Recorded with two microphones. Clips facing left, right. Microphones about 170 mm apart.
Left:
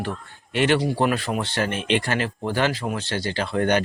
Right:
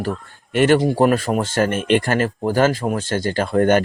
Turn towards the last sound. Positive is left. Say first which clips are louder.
# right 6 dB
turn(degrees=-45)  # may be behind; listen again after turning